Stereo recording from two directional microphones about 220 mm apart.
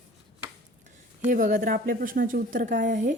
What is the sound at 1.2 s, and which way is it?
A woman's voice, 35° right (ahead or behind).